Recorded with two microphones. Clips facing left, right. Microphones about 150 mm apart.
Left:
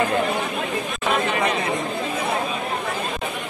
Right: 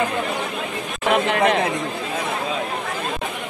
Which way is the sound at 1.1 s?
65° right (ahead or behind).